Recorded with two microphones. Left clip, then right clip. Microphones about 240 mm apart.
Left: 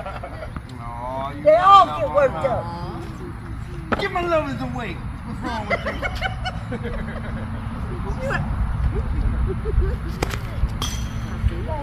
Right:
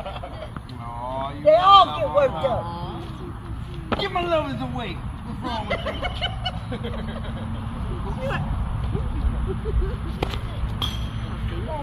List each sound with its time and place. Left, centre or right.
1.1 s speech: right
3.9 s speech: right